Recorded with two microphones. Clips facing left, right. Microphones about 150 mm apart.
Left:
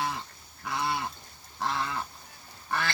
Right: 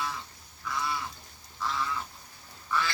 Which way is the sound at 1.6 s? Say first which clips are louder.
Left 2 dB; 65° left (ahead or behind).